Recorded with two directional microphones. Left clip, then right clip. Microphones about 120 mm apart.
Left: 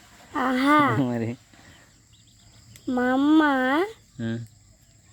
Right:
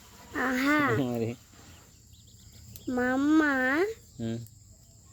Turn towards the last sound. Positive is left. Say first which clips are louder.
# left 4 dB
turn(degrees=90)